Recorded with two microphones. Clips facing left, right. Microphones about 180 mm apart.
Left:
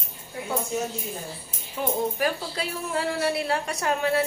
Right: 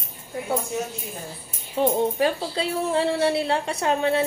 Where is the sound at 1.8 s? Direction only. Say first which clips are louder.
Right 5 dB; 30° right (ahead or behind).